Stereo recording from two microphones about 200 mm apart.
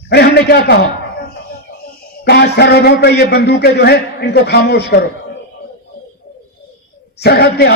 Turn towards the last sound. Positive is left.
turn(degrees=55)  # may be behind; listen again after turning